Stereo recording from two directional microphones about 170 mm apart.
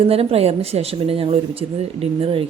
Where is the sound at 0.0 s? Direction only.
35° right (ahead or behind).